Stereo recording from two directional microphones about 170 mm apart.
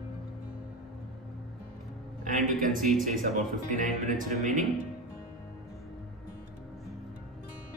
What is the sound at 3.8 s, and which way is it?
Speech, 50° right (ahead or behind).